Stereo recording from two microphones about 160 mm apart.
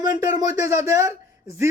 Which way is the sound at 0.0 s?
20° right (ahead or behind).